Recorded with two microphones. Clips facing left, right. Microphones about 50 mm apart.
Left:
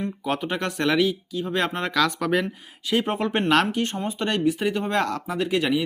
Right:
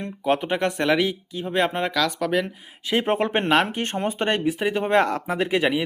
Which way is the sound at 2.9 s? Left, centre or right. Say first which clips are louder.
Right 2 dB; right.